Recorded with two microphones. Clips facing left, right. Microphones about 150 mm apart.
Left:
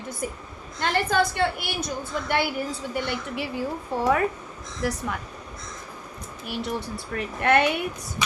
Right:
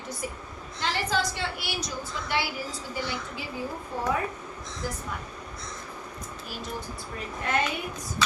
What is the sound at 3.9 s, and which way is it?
Speech, 75° left (ahead or behind).